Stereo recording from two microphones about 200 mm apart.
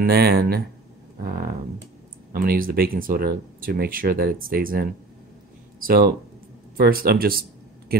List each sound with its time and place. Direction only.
0.0 s speech: 50° right (ahead or behind)
6.8 s speech: 50° right (ahead or behind)